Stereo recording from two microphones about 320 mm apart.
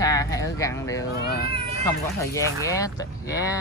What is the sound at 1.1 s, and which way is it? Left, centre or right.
Speech, left.